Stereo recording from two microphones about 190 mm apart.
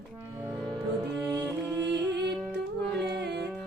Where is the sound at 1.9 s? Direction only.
65° right (ahead or behind).